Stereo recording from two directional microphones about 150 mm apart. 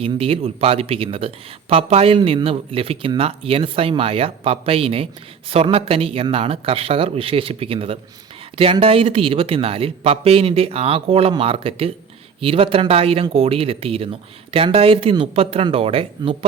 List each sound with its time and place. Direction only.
0.0 s speech: 40° right (ahead or behind)